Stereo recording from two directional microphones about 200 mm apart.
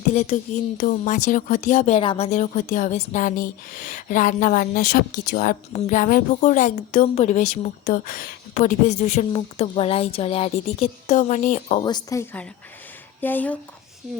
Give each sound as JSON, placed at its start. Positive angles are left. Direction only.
{"t": 0.1, "sound": "speech", "side_deg": 35}
{"t": 11.8, "sound": "a woman's voice", "side_deg": 20}